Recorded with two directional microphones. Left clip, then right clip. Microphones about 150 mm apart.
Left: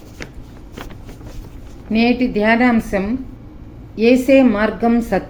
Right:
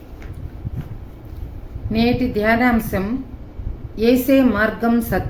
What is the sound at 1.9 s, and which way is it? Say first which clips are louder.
A woman's voice: left 2 dB; 30° left (ahead or behind).